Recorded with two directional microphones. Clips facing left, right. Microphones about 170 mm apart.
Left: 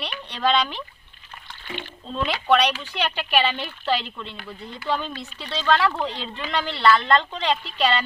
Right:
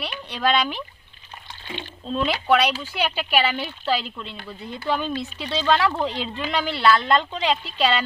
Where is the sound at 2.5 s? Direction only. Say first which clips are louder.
Left 1 dB; 10° right (ahead or behind).